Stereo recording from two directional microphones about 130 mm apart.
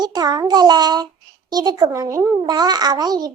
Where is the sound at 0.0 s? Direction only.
30° right (ahead or behind).